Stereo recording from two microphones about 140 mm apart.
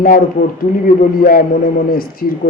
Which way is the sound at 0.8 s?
90° left.